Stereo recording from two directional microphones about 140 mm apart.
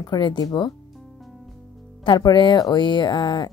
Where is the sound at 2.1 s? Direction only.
30° left (ahead or behind).